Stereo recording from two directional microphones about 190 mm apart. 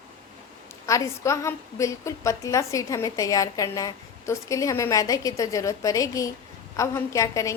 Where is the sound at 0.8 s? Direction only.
15° left (ahead or behind).